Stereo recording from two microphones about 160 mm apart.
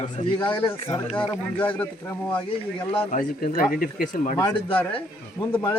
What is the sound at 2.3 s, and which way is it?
Speech, 35° left (ahead or behind).